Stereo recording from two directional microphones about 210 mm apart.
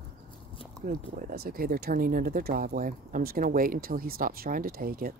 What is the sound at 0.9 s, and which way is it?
Speech, 40° right (ahead or behind).